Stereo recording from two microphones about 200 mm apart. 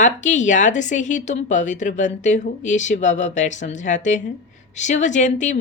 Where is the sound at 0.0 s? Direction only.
35° left (ahead or behind).